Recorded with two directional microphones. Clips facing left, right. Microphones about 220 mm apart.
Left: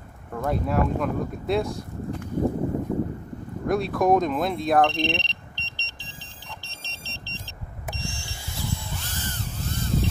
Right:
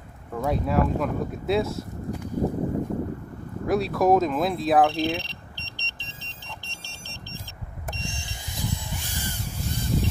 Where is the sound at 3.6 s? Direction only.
Centre (ahead or behind); by 6.1 s 20° right (ahead or behind).